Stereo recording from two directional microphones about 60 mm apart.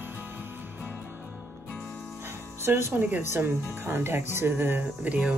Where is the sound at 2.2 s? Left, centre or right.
Right.